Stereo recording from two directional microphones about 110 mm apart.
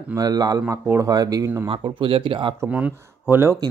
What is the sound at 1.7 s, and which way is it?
Speech, 50° right (ahead or behind).